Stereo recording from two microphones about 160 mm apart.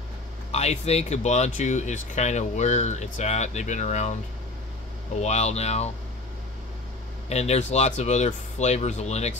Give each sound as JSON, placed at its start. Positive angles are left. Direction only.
{"t": 0.5, "sound": "speech", "side_deg": 40}
{"t": 5.2, "sound": "speech", "side_deg": 45}
{"t": 7.2, "sound": "speech", "side_deg": 40}